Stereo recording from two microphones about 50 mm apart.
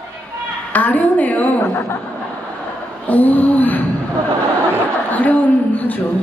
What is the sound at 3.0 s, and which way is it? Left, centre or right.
Speech, left.